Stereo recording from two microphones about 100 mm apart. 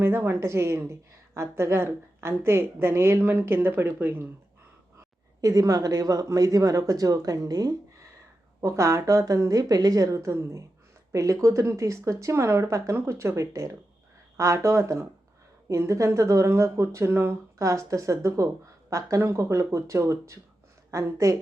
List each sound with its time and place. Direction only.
0.0 s a woman's voice: 25° right (ahead or behind)
5.4 s speech: 35° right (ahead or behind)